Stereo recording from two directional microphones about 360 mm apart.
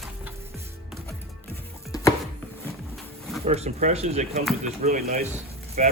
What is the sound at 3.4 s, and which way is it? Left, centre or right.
Speech, centre.